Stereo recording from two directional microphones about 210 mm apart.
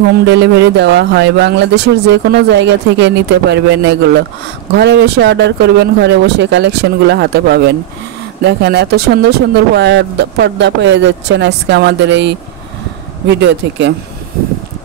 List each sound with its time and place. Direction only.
0.2 s speech: 55° right (ahead or behind)